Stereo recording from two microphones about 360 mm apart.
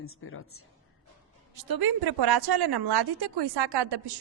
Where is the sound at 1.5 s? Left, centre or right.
Right.